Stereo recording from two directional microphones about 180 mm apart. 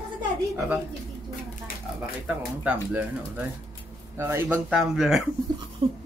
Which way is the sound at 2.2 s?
10° right (ahead or behind).